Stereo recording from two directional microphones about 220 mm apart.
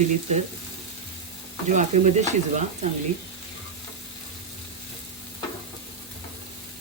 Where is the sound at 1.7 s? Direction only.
35° right (ahead or behind).